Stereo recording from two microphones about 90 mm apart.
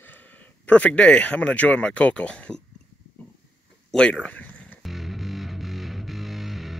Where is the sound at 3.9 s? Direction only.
10° left (ahead or behind).